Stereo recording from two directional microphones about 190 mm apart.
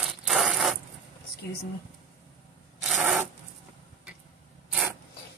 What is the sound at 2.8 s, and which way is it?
Zipper, centre (ahead or behind).